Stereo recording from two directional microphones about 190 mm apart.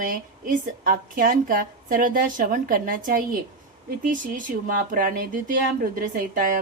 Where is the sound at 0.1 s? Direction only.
45° right (ahead or behind).